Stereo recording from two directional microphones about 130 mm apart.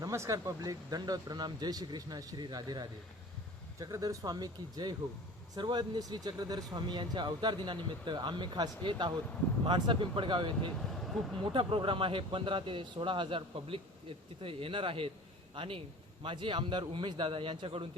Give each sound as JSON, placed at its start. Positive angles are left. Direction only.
{"t": 0.0, "sound": "speech", "side_deg": -25}
{"t": 10.8, "sound": "vehicle", "side_deg": 0}
{"t": 11.5, "sound": "speech", "side_deg": -40}